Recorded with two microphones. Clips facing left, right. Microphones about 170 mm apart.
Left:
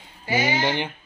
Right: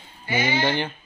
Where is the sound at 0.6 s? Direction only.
15° left (ahead or behind).